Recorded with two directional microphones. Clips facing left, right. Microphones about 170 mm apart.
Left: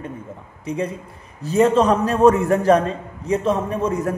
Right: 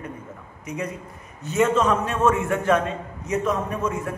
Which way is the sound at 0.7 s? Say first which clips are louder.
Left 5 dB; 30° left (ahead or behind).